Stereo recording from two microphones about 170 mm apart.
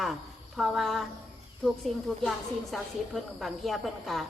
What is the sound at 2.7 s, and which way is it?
A woman's voice, centre (ahead or behind).